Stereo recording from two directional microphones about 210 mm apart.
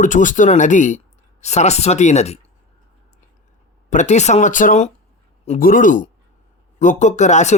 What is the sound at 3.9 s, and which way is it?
Speech, 35° left (ahead or behind).